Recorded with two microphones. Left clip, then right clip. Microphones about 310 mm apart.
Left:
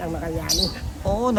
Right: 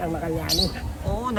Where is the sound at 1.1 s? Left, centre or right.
Centre.